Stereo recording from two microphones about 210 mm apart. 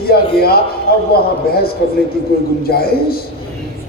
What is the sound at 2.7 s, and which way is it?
Speech, 45° left (ahead or behind).